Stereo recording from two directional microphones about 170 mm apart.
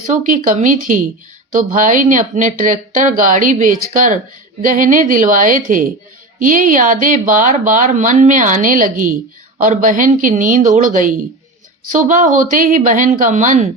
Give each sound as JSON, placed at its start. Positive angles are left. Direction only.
{"t": 0.1, "sound": "speech", "side_deg": -50}